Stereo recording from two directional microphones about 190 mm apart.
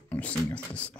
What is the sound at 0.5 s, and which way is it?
Beatboxing, 5° left (ahead or behind).